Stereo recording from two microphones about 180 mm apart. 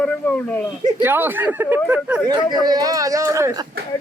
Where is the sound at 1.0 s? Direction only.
10° right (ahead or behind).